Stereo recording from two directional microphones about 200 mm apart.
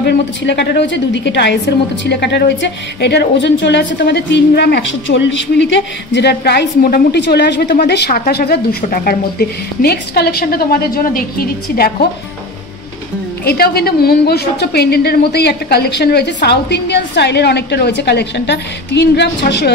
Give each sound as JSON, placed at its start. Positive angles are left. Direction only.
{"t": 0.0, "sound": "a woman's voice", "side_deg": 60}
{"t": 13.5, "sound": "a woman's voice", "side_deg": 50}